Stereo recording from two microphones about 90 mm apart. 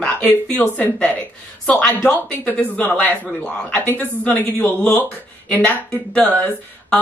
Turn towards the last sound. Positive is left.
turn(degrees=10)  # may be behind; listen again after turning